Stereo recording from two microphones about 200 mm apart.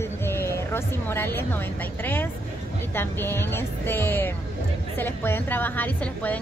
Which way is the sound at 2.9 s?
10° left (ahead or behind).